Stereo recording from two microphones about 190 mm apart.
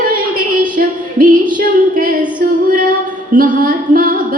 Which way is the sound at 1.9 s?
45° right (ahead or behind).